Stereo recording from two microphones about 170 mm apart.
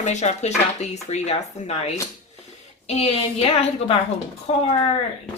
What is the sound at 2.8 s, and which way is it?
A woman's voice, 40° left (ahead or behind).